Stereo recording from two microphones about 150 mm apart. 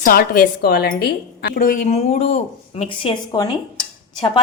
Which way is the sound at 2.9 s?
30° left (ahead or behind).